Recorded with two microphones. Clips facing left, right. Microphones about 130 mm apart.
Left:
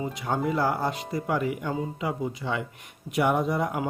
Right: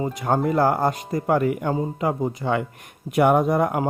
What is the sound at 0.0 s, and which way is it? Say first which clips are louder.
Speech: right 6 dB; 45° right (ahead or behind).